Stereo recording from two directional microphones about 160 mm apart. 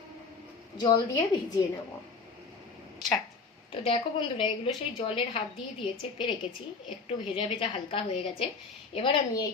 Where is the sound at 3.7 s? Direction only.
35° left (ahead or behind).